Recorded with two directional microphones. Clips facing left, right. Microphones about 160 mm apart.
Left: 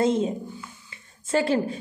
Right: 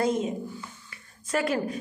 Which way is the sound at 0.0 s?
25° left (ahead or behind).